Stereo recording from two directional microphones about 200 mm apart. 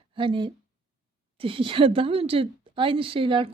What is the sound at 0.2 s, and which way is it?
A woman's voice, 25° right (ahead or behind).